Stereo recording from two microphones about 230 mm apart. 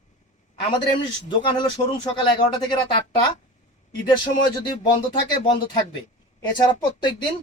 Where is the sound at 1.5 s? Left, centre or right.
Centre.